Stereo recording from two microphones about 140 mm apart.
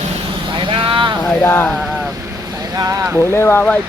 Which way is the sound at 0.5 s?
35° right (ahead or behind).